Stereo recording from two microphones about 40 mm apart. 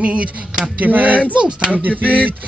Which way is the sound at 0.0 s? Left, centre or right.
Right.